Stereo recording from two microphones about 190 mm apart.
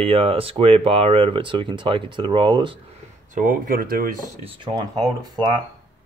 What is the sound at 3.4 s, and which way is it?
Speech, 45° right (ahead or behind).